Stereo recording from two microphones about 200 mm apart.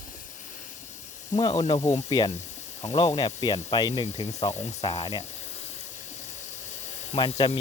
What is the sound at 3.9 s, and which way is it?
Speech, 35° left (ahead or behind).